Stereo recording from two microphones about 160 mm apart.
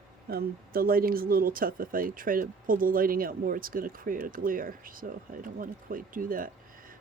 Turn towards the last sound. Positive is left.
turn(degrees=-60)  # may be behind; listen again after turning